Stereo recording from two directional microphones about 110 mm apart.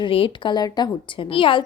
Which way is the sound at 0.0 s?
50° left (ahead or behind).